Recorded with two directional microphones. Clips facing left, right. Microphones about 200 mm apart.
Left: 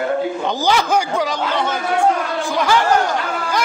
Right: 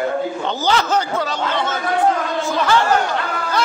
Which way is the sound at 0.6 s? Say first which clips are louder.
Left 1 dB; 10° left (ahead or behind).